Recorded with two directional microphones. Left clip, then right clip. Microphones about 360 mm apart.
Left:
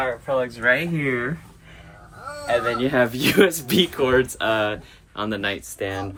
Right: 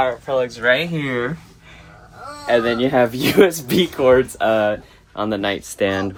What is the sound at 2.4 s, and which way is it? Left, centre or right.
Speech, right.